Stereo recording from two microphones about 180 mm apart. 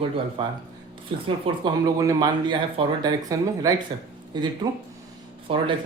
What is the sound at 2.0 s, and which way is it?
Speech, 20° right (ahead or behind).